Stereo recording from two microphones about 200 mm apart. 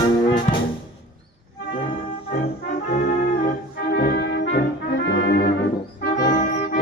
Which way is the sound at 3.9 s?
60° left (ahead or behind).